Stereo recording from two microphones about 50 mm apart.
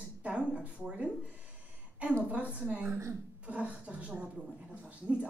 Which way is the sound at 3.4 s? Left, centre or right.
Right.